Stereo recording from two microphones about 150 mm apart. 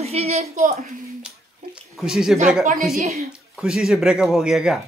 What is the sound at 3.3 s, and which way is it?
Speech, 5° right (ahead or behind).